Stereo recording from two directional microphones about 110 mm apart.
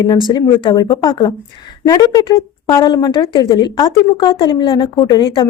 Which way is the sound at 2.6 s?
45° left (ahead or behind).